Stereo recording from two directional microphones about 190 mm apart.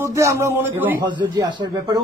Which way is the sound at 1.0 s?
20° right (ahead or behind).